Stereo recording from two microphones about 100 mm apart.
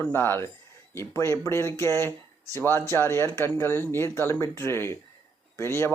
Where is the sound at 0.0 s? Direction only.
20° left (ahead or behind).